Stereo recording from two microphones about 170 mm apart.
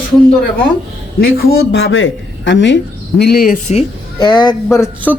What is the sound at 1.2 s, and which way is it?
A man's voice, 65° left (ahead or behind).